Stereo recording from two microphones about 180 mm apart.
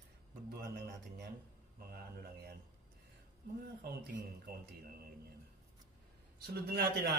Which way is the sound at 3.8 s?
60° right (ahead or behind).